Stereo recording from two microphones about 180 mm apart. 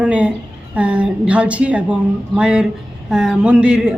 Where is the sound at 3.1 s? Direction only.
5° right (ahead or behind).